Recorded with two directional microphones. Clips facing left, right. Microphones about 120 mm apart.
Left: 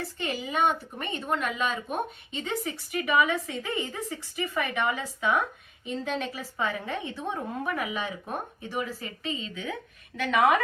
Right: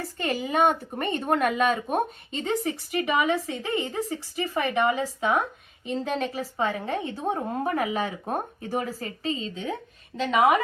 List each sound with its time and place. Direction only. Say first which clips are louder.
0.2 s a woman's voice: right 4 dB; 45° right (ahead or behind)
10.2 s speech: right 2 dB; 20° right (ahead or behind)